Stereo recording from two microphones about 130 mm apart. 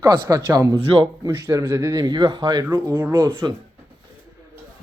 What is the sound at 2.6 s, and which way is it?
Speech, 15° right (ahead or behind).